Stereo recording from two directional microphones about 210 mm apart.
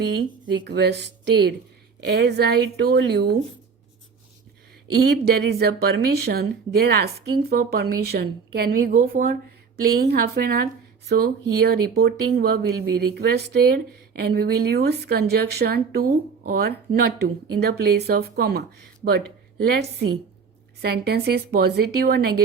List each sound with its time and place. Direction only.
0.1 s speech: 55° right (ahead or behind)
4.9 s speech: 50° right (ahead or behind)
20.8 s speech: 50° right (ahead or behind)